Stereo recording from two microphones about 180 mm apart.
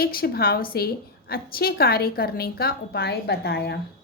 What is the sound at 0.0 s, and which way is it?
A woman's voice, 55° left (ahead or behind).